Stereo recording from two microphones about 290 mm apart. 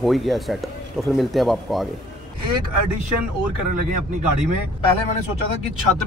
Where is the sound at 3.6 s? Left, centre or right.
Right.